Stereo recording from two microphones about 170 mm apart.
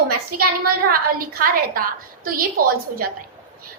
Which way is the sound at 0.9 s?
60° right (ahead or behind).